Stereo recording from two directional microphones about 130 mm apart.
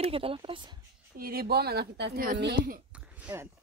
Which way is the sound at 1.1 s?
90° right.